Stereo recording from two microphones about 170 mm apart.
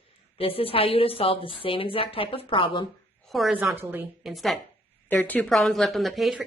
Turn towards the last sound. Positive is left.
turn(degrees=0)  # may be behind; listen again after turning